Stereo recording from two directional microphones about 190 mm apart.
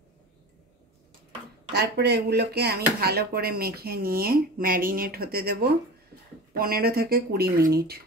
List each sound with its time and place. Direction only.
1.7 s speech: 60° right (ahead or behind)